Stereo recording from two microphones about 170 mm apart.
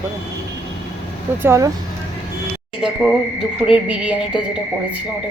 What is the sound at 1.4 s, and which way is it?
Speech, 15° right (ahead or behind).